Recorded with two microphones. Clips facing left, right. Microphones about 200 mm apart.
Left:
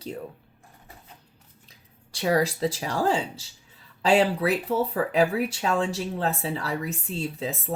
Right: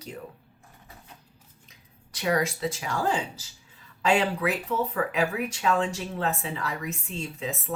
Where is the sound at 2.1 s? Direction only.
30° left (ahead or behind).